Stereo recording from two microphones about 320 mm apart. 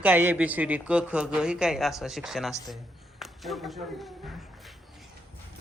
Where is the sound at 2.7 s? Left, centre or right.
Centre.